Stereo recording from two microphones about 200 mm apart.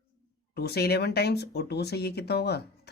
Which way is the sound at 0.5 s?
55° left (ahead or behind).